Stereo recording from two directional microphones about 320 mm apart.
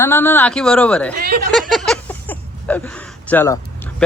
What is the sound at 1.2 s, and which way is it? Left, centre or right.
Speech, right.